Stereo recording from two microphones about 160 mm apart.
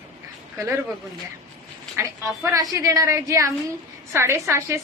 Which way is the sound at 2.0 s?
15° right (ahead or behind).